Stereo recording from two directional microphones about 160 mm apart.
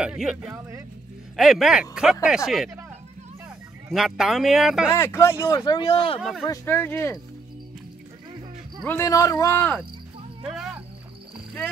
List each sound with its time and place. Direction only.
0.0 s speech: 5° right (ahead or behind)
3.9 s speech: 5° right (ahead or behind)
4.9 s speech: 15° left (ahead or behind)
5.8 s speech: 35° left (ahead or behind)
6.4 s speech: 15° left (ahead or behind)
8.8 s speech: 15° left (ahead or behind)
10.5 s cricket: centre (ahead or behind)